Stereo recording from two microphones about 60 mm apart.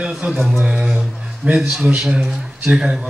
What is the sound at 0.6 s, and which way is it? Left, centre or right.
A man's voice, centre.